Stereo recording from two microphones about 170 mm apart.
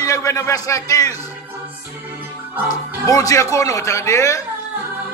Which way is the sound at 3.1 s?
20° left (ahead or behind).